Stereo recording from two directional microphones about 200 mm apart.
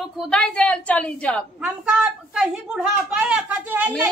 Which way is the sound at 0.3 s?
5° left (ahead or behind).